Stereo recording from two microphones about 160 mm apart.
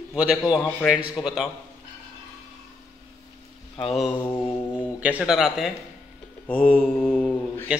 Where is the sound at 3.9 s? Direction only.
Centre (ahead or behind).